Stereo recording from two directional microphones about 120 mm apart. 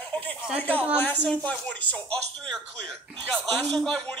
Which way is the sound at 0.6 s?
15° left (ahead or behind).